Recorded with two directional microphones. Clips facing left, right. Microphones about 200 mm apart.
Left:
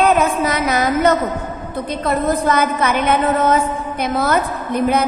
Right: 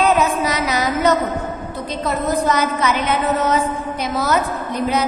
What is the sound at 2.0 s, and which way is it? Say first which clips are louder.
A woman's voice: left 2 dB; 55° left (ahead or behind).